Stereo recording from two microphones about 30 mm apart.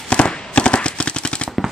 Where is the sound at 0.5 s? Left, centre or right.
Left.